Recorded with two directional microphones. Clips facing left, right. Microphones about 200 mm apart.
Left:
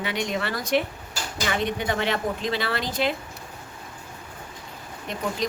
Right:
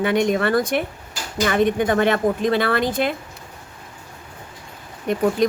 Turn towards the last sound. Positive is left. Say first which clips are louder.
# right 11 dB
turn(degrees=-50)  # may be behind; listen again after turning